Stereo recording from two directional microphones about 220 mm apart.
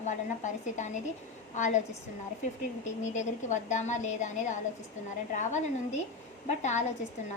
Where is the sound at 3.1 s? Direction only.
35° left (ahead or behind).